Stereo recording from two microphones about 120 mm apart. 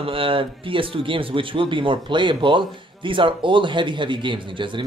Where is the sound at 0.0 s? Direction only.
50° right (ahead or behind).